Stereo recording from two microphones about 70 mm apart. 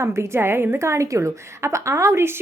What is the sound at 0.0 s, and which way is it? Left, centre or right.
A woman's voice, right.